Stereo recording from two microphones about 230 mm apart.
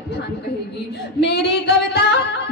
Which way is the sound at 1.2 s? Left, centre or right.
Left.